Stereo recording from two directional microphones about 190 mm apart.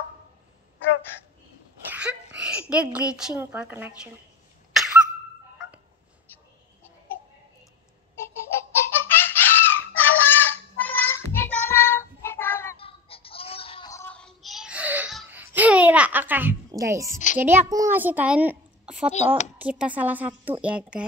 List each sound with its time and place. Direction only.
1.9 s a sound: 5° right (ahead or behind)
2.7 s a woman's voice: 5° right (ahead or behind)
4.7 s dog: centre (ahead or behind)
8.8 s fowl: 10° left (ahead or behind)
12.7 s a sound: 30° left (ahead or behind)
13.8 s child singing: 10° left (ahead or behind); by 17.2 s 15° right (ahead or behind)
17.4 s a child's voice: 15° right (ahead or behind)